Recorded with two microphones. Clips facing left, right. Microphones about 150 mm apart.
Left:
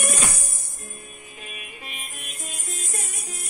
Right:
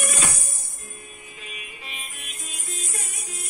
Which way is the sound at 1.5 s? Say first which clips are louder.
Even; 50° left (ahead or behind).